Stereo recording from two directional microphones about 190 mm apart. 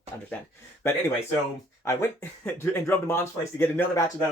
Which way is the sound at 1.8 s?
15° left (ahead or behind).